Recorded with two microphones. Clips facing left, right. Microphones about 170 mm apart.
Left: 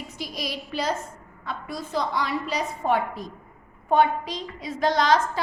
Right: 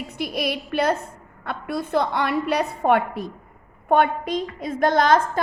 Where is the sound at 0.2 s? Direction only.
60° right (ahead or behind).